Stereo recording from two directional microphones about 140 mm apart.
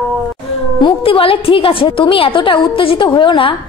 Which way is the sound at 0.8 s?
40° left (ahead or behind).